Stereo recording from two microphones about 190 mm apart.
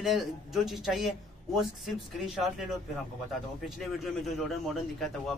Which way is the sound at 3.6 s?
Centre (ahead or behind).